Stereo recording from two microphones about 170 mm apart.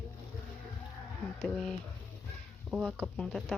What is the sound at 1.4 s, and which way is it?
Speech, 5° left (ahead or behind).